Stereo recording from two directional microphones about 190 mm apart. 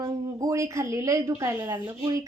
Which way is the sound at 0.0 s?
20° right (ahead or behind).